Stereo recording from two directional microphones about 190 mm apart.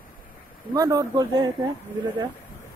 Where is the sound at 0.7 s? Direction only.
20° right (ahead or behind).